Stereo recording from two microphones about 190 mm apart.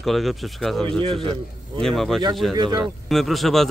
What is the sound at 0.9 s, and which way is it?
Speech, 30° right (ahead or behind).